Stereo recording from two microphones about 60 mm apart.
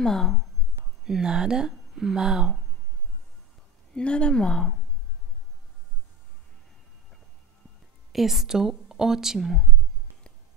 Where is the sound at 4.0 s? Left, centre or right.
Centre.